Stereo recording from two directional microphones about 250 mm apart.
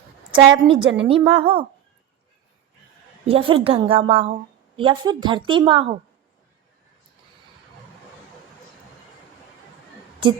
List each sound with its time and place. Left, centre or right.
0.3 s a woman's voice: centre
3.2 s a woman's voice: right